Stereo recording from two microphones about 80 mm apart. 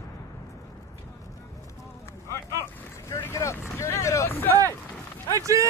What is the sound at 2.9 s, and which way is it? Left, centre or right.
Boat, left.